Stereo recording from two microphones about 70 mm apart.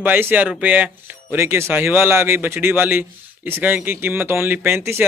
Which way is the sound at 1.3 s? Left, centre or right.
Right.